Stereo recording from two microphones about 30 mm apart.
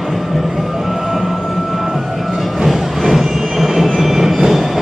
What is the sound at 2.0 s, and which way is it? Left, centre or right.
Reversing beeps, centre.